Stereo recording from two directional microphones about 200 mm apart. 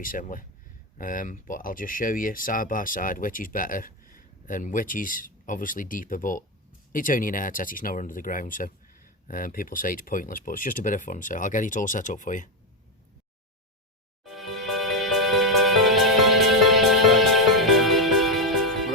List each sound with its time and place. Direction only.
0.0 s speech: 45° left (ahead or behind)
14.3 s music: centre (ahead or behind)